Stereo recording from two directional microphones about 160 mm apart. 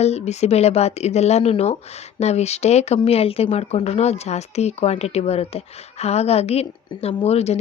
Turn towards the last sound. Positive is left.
turn(degrees=40)  # may be behind; listen again after turning